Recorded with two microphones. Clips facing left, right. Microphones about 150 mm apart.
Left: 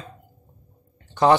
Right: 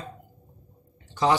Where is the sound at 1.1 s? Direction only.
60° left (ahead or behind).